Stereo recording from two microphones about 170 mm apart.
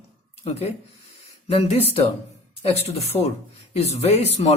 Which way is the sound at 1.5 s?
35° left (ahead or behind).